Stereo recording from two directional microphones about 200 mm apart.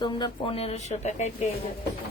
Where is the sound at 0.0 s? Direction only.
25° left (ahead or behind).